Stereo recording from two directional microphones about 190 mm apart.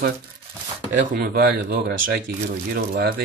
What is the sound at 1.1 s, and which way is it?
Speech, 55° right (ahead or behind).